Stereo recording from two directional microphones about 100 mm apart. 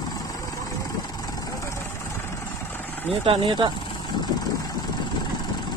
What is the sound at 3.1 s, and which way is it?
Speech, 70° right (ahead or behind).